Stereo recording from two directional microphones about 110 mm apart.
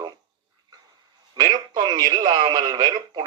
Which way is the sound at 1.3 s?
40° right (ahead or behind).